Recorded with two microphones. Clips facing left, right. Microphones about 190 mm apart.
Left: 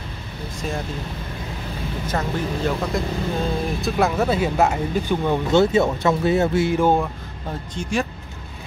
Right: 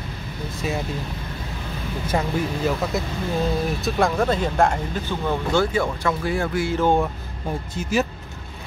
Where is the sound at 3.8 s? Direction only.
Centre (ahead or behind); by 6.8 s 20° left (ahead or behind).